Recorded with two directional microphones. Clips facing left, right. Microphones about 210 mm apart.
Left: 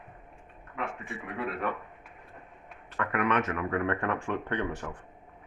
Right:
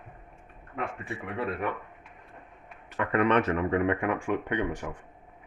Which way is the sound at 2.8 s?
20° right (ahead or behind).